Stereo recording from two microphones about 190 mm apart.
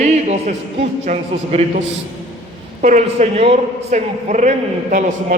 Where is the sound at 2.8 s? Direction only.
40° right (ahead or behind).